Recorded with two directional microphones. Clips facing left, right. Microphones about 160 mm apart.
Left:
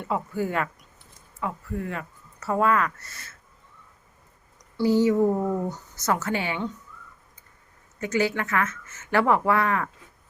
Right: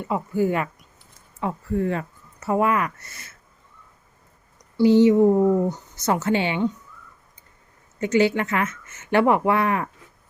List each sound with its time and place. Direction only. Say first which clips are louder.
0.0 s speech: right 5 dB; 10° right (ahead or behind)
1.4 s speech: right 6 dB; 30° right (ahead or behind)
2.4 s speech: right 2 dB; 15° right (ahead or behind)
4.8 s speech: right 5 dB; 20° right (ahead or behind)
8.0 s speech: right 5 dB; 25° right (ahead or behind)